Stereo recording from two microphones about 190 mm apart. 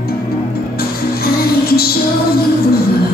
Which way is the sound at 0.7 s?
55° left (ahead or behind).